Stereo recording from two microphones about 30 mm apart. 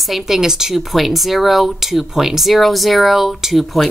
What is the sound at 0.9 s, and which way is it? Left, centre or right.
Speech, centre.